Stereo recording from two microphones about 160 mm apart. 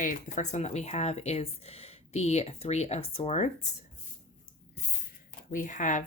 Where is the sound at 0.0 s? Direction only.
50° left (ahead or behind).